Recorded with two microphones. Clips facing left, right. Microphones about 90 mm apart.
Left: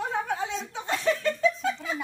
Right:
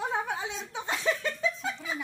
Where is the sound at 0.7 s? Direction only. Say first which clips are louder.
Left 2 dB; 15° right (ahead or behind).